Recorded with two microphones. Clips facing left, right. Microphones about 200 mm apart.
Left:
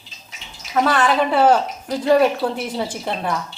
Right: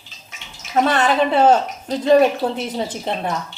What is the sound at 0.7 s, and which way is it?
A woman's voice, 25° right (ahead or behind).